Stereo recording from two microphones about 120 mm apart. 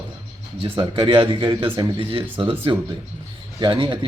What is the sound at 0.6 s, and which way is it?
Speech, 45° right (ahead or behind).